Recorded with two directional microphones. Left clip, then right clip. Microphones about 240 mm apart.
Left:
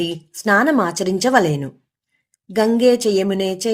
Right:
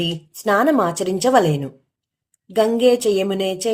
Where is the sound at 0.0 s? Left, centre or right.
Left.